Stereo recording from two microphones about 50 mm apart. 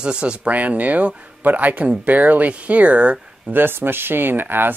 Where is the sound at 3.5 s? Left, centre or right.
Right.